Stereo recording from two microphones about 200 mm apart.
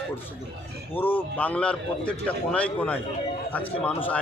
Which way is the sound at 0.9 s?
10° left (ahead or behind).